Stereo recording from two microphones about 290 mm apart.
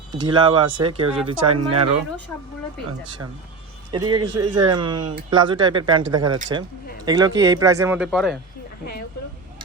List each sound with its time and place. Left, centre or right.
0.1 s speech: centre
1.5 s speech: right
3.9 s speech: centre